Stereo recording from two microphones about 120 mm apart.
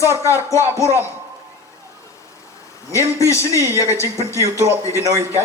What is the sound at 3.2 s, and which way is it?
A man's voice, 25° left (ahead or behind).